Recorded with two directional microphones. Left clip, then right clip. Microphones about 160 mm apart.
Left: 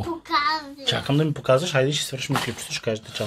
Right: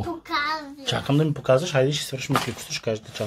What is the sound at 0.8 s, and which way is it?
Speech, centre (ahead or behind).